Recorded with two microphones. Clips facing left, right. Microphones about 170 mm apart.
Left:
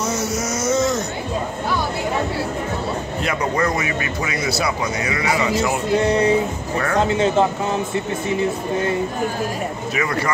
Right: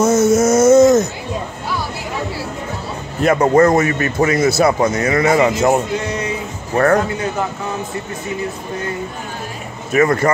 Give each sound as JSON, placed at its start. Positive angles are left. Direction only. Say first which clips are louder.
{"t": 0.0, "sound": "a sound", "louder": "right 11 dB", "side_deg": -50}
{"t": 3.3, "sound": "a man's voice", "louder": "right 10 dB", "side_deg": -45}
{"t": 6.0, "sound": "speech", "louder": "left 6 dB", "side_deg": 35}
{"t": 9.9, "sound": "a man's voice", "louder": "right 10 dB", "side_deg": -50}